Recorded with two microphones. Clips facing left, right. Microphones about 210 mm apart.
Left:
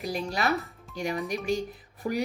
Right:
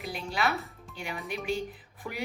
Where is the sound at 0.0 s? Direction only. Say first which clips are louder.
Left 2 dB; 40° left (ahead or behind).